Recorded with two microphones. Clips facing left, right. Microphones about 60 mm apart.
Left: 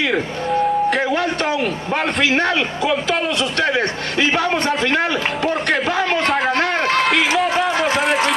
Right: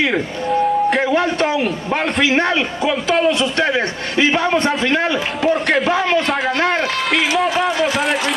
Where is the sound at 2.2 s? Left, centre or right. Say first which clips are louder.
Right 1 dB; right.